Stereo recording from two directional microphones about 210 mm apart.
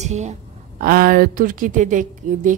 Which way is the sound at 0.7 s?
45° right (ahead or behind).